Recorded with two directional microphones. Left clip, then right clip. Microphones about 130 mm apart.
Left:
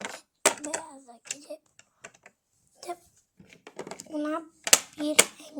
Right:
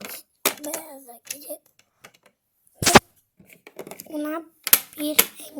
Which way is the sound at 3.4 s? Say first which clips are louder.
Right 1 dB; 20° right (ahead or behind).